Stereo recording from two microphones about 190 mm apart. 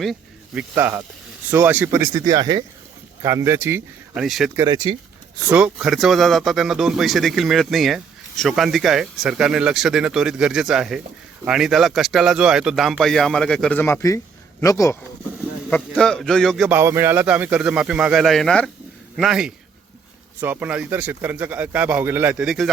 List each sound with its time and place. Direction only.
0.0 s snake: centre (ahead or behind)
0.8 s a man's voice: 10° right (ahead or behind)
4.5 s speech: 20° right (ahead or behind)
5.5 s speech: 5° right (ahead or behind); by 14.9 s 15° left (ahead or behind)
15.7 s speech: 5° left (ahead or behind)
16.6 s a man's voice: 10° right (ahead or behind)